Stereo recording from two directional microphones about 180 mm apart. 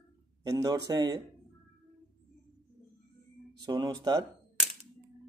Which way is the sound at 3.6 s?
20° right (ahead or behind).